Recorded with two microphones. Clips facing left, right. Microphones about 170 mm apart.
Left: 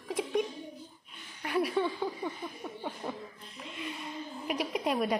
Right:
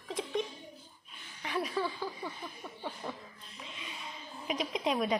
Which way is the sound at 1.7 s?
20° left (ahead or behind).